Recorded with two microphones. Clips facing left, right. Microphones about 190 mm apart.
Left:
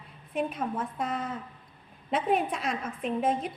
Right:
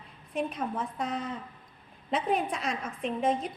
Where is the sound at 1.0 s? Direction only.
50° left (ahead or behind).